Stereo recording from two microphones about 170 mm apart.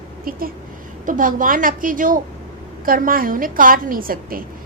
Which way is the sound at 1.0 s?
50° right (ahead or behind).